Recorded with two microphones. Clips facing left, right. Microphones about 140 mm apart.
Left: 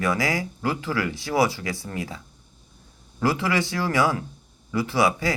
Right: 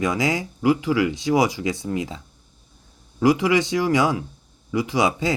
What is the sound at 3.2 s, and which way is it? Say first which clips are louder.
Speech: right 5 dB; 15° right (ahead or behind).